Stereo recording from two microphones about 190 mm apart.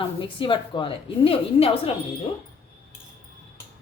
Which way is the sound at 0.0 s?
25° left (ahead or behind).